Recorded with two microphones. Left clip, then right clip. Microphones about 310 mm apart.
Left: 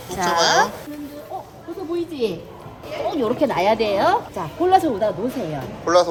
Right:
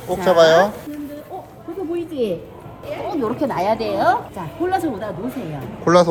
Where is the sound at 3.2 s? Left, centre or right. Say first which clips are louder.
Left 1 dB; centre.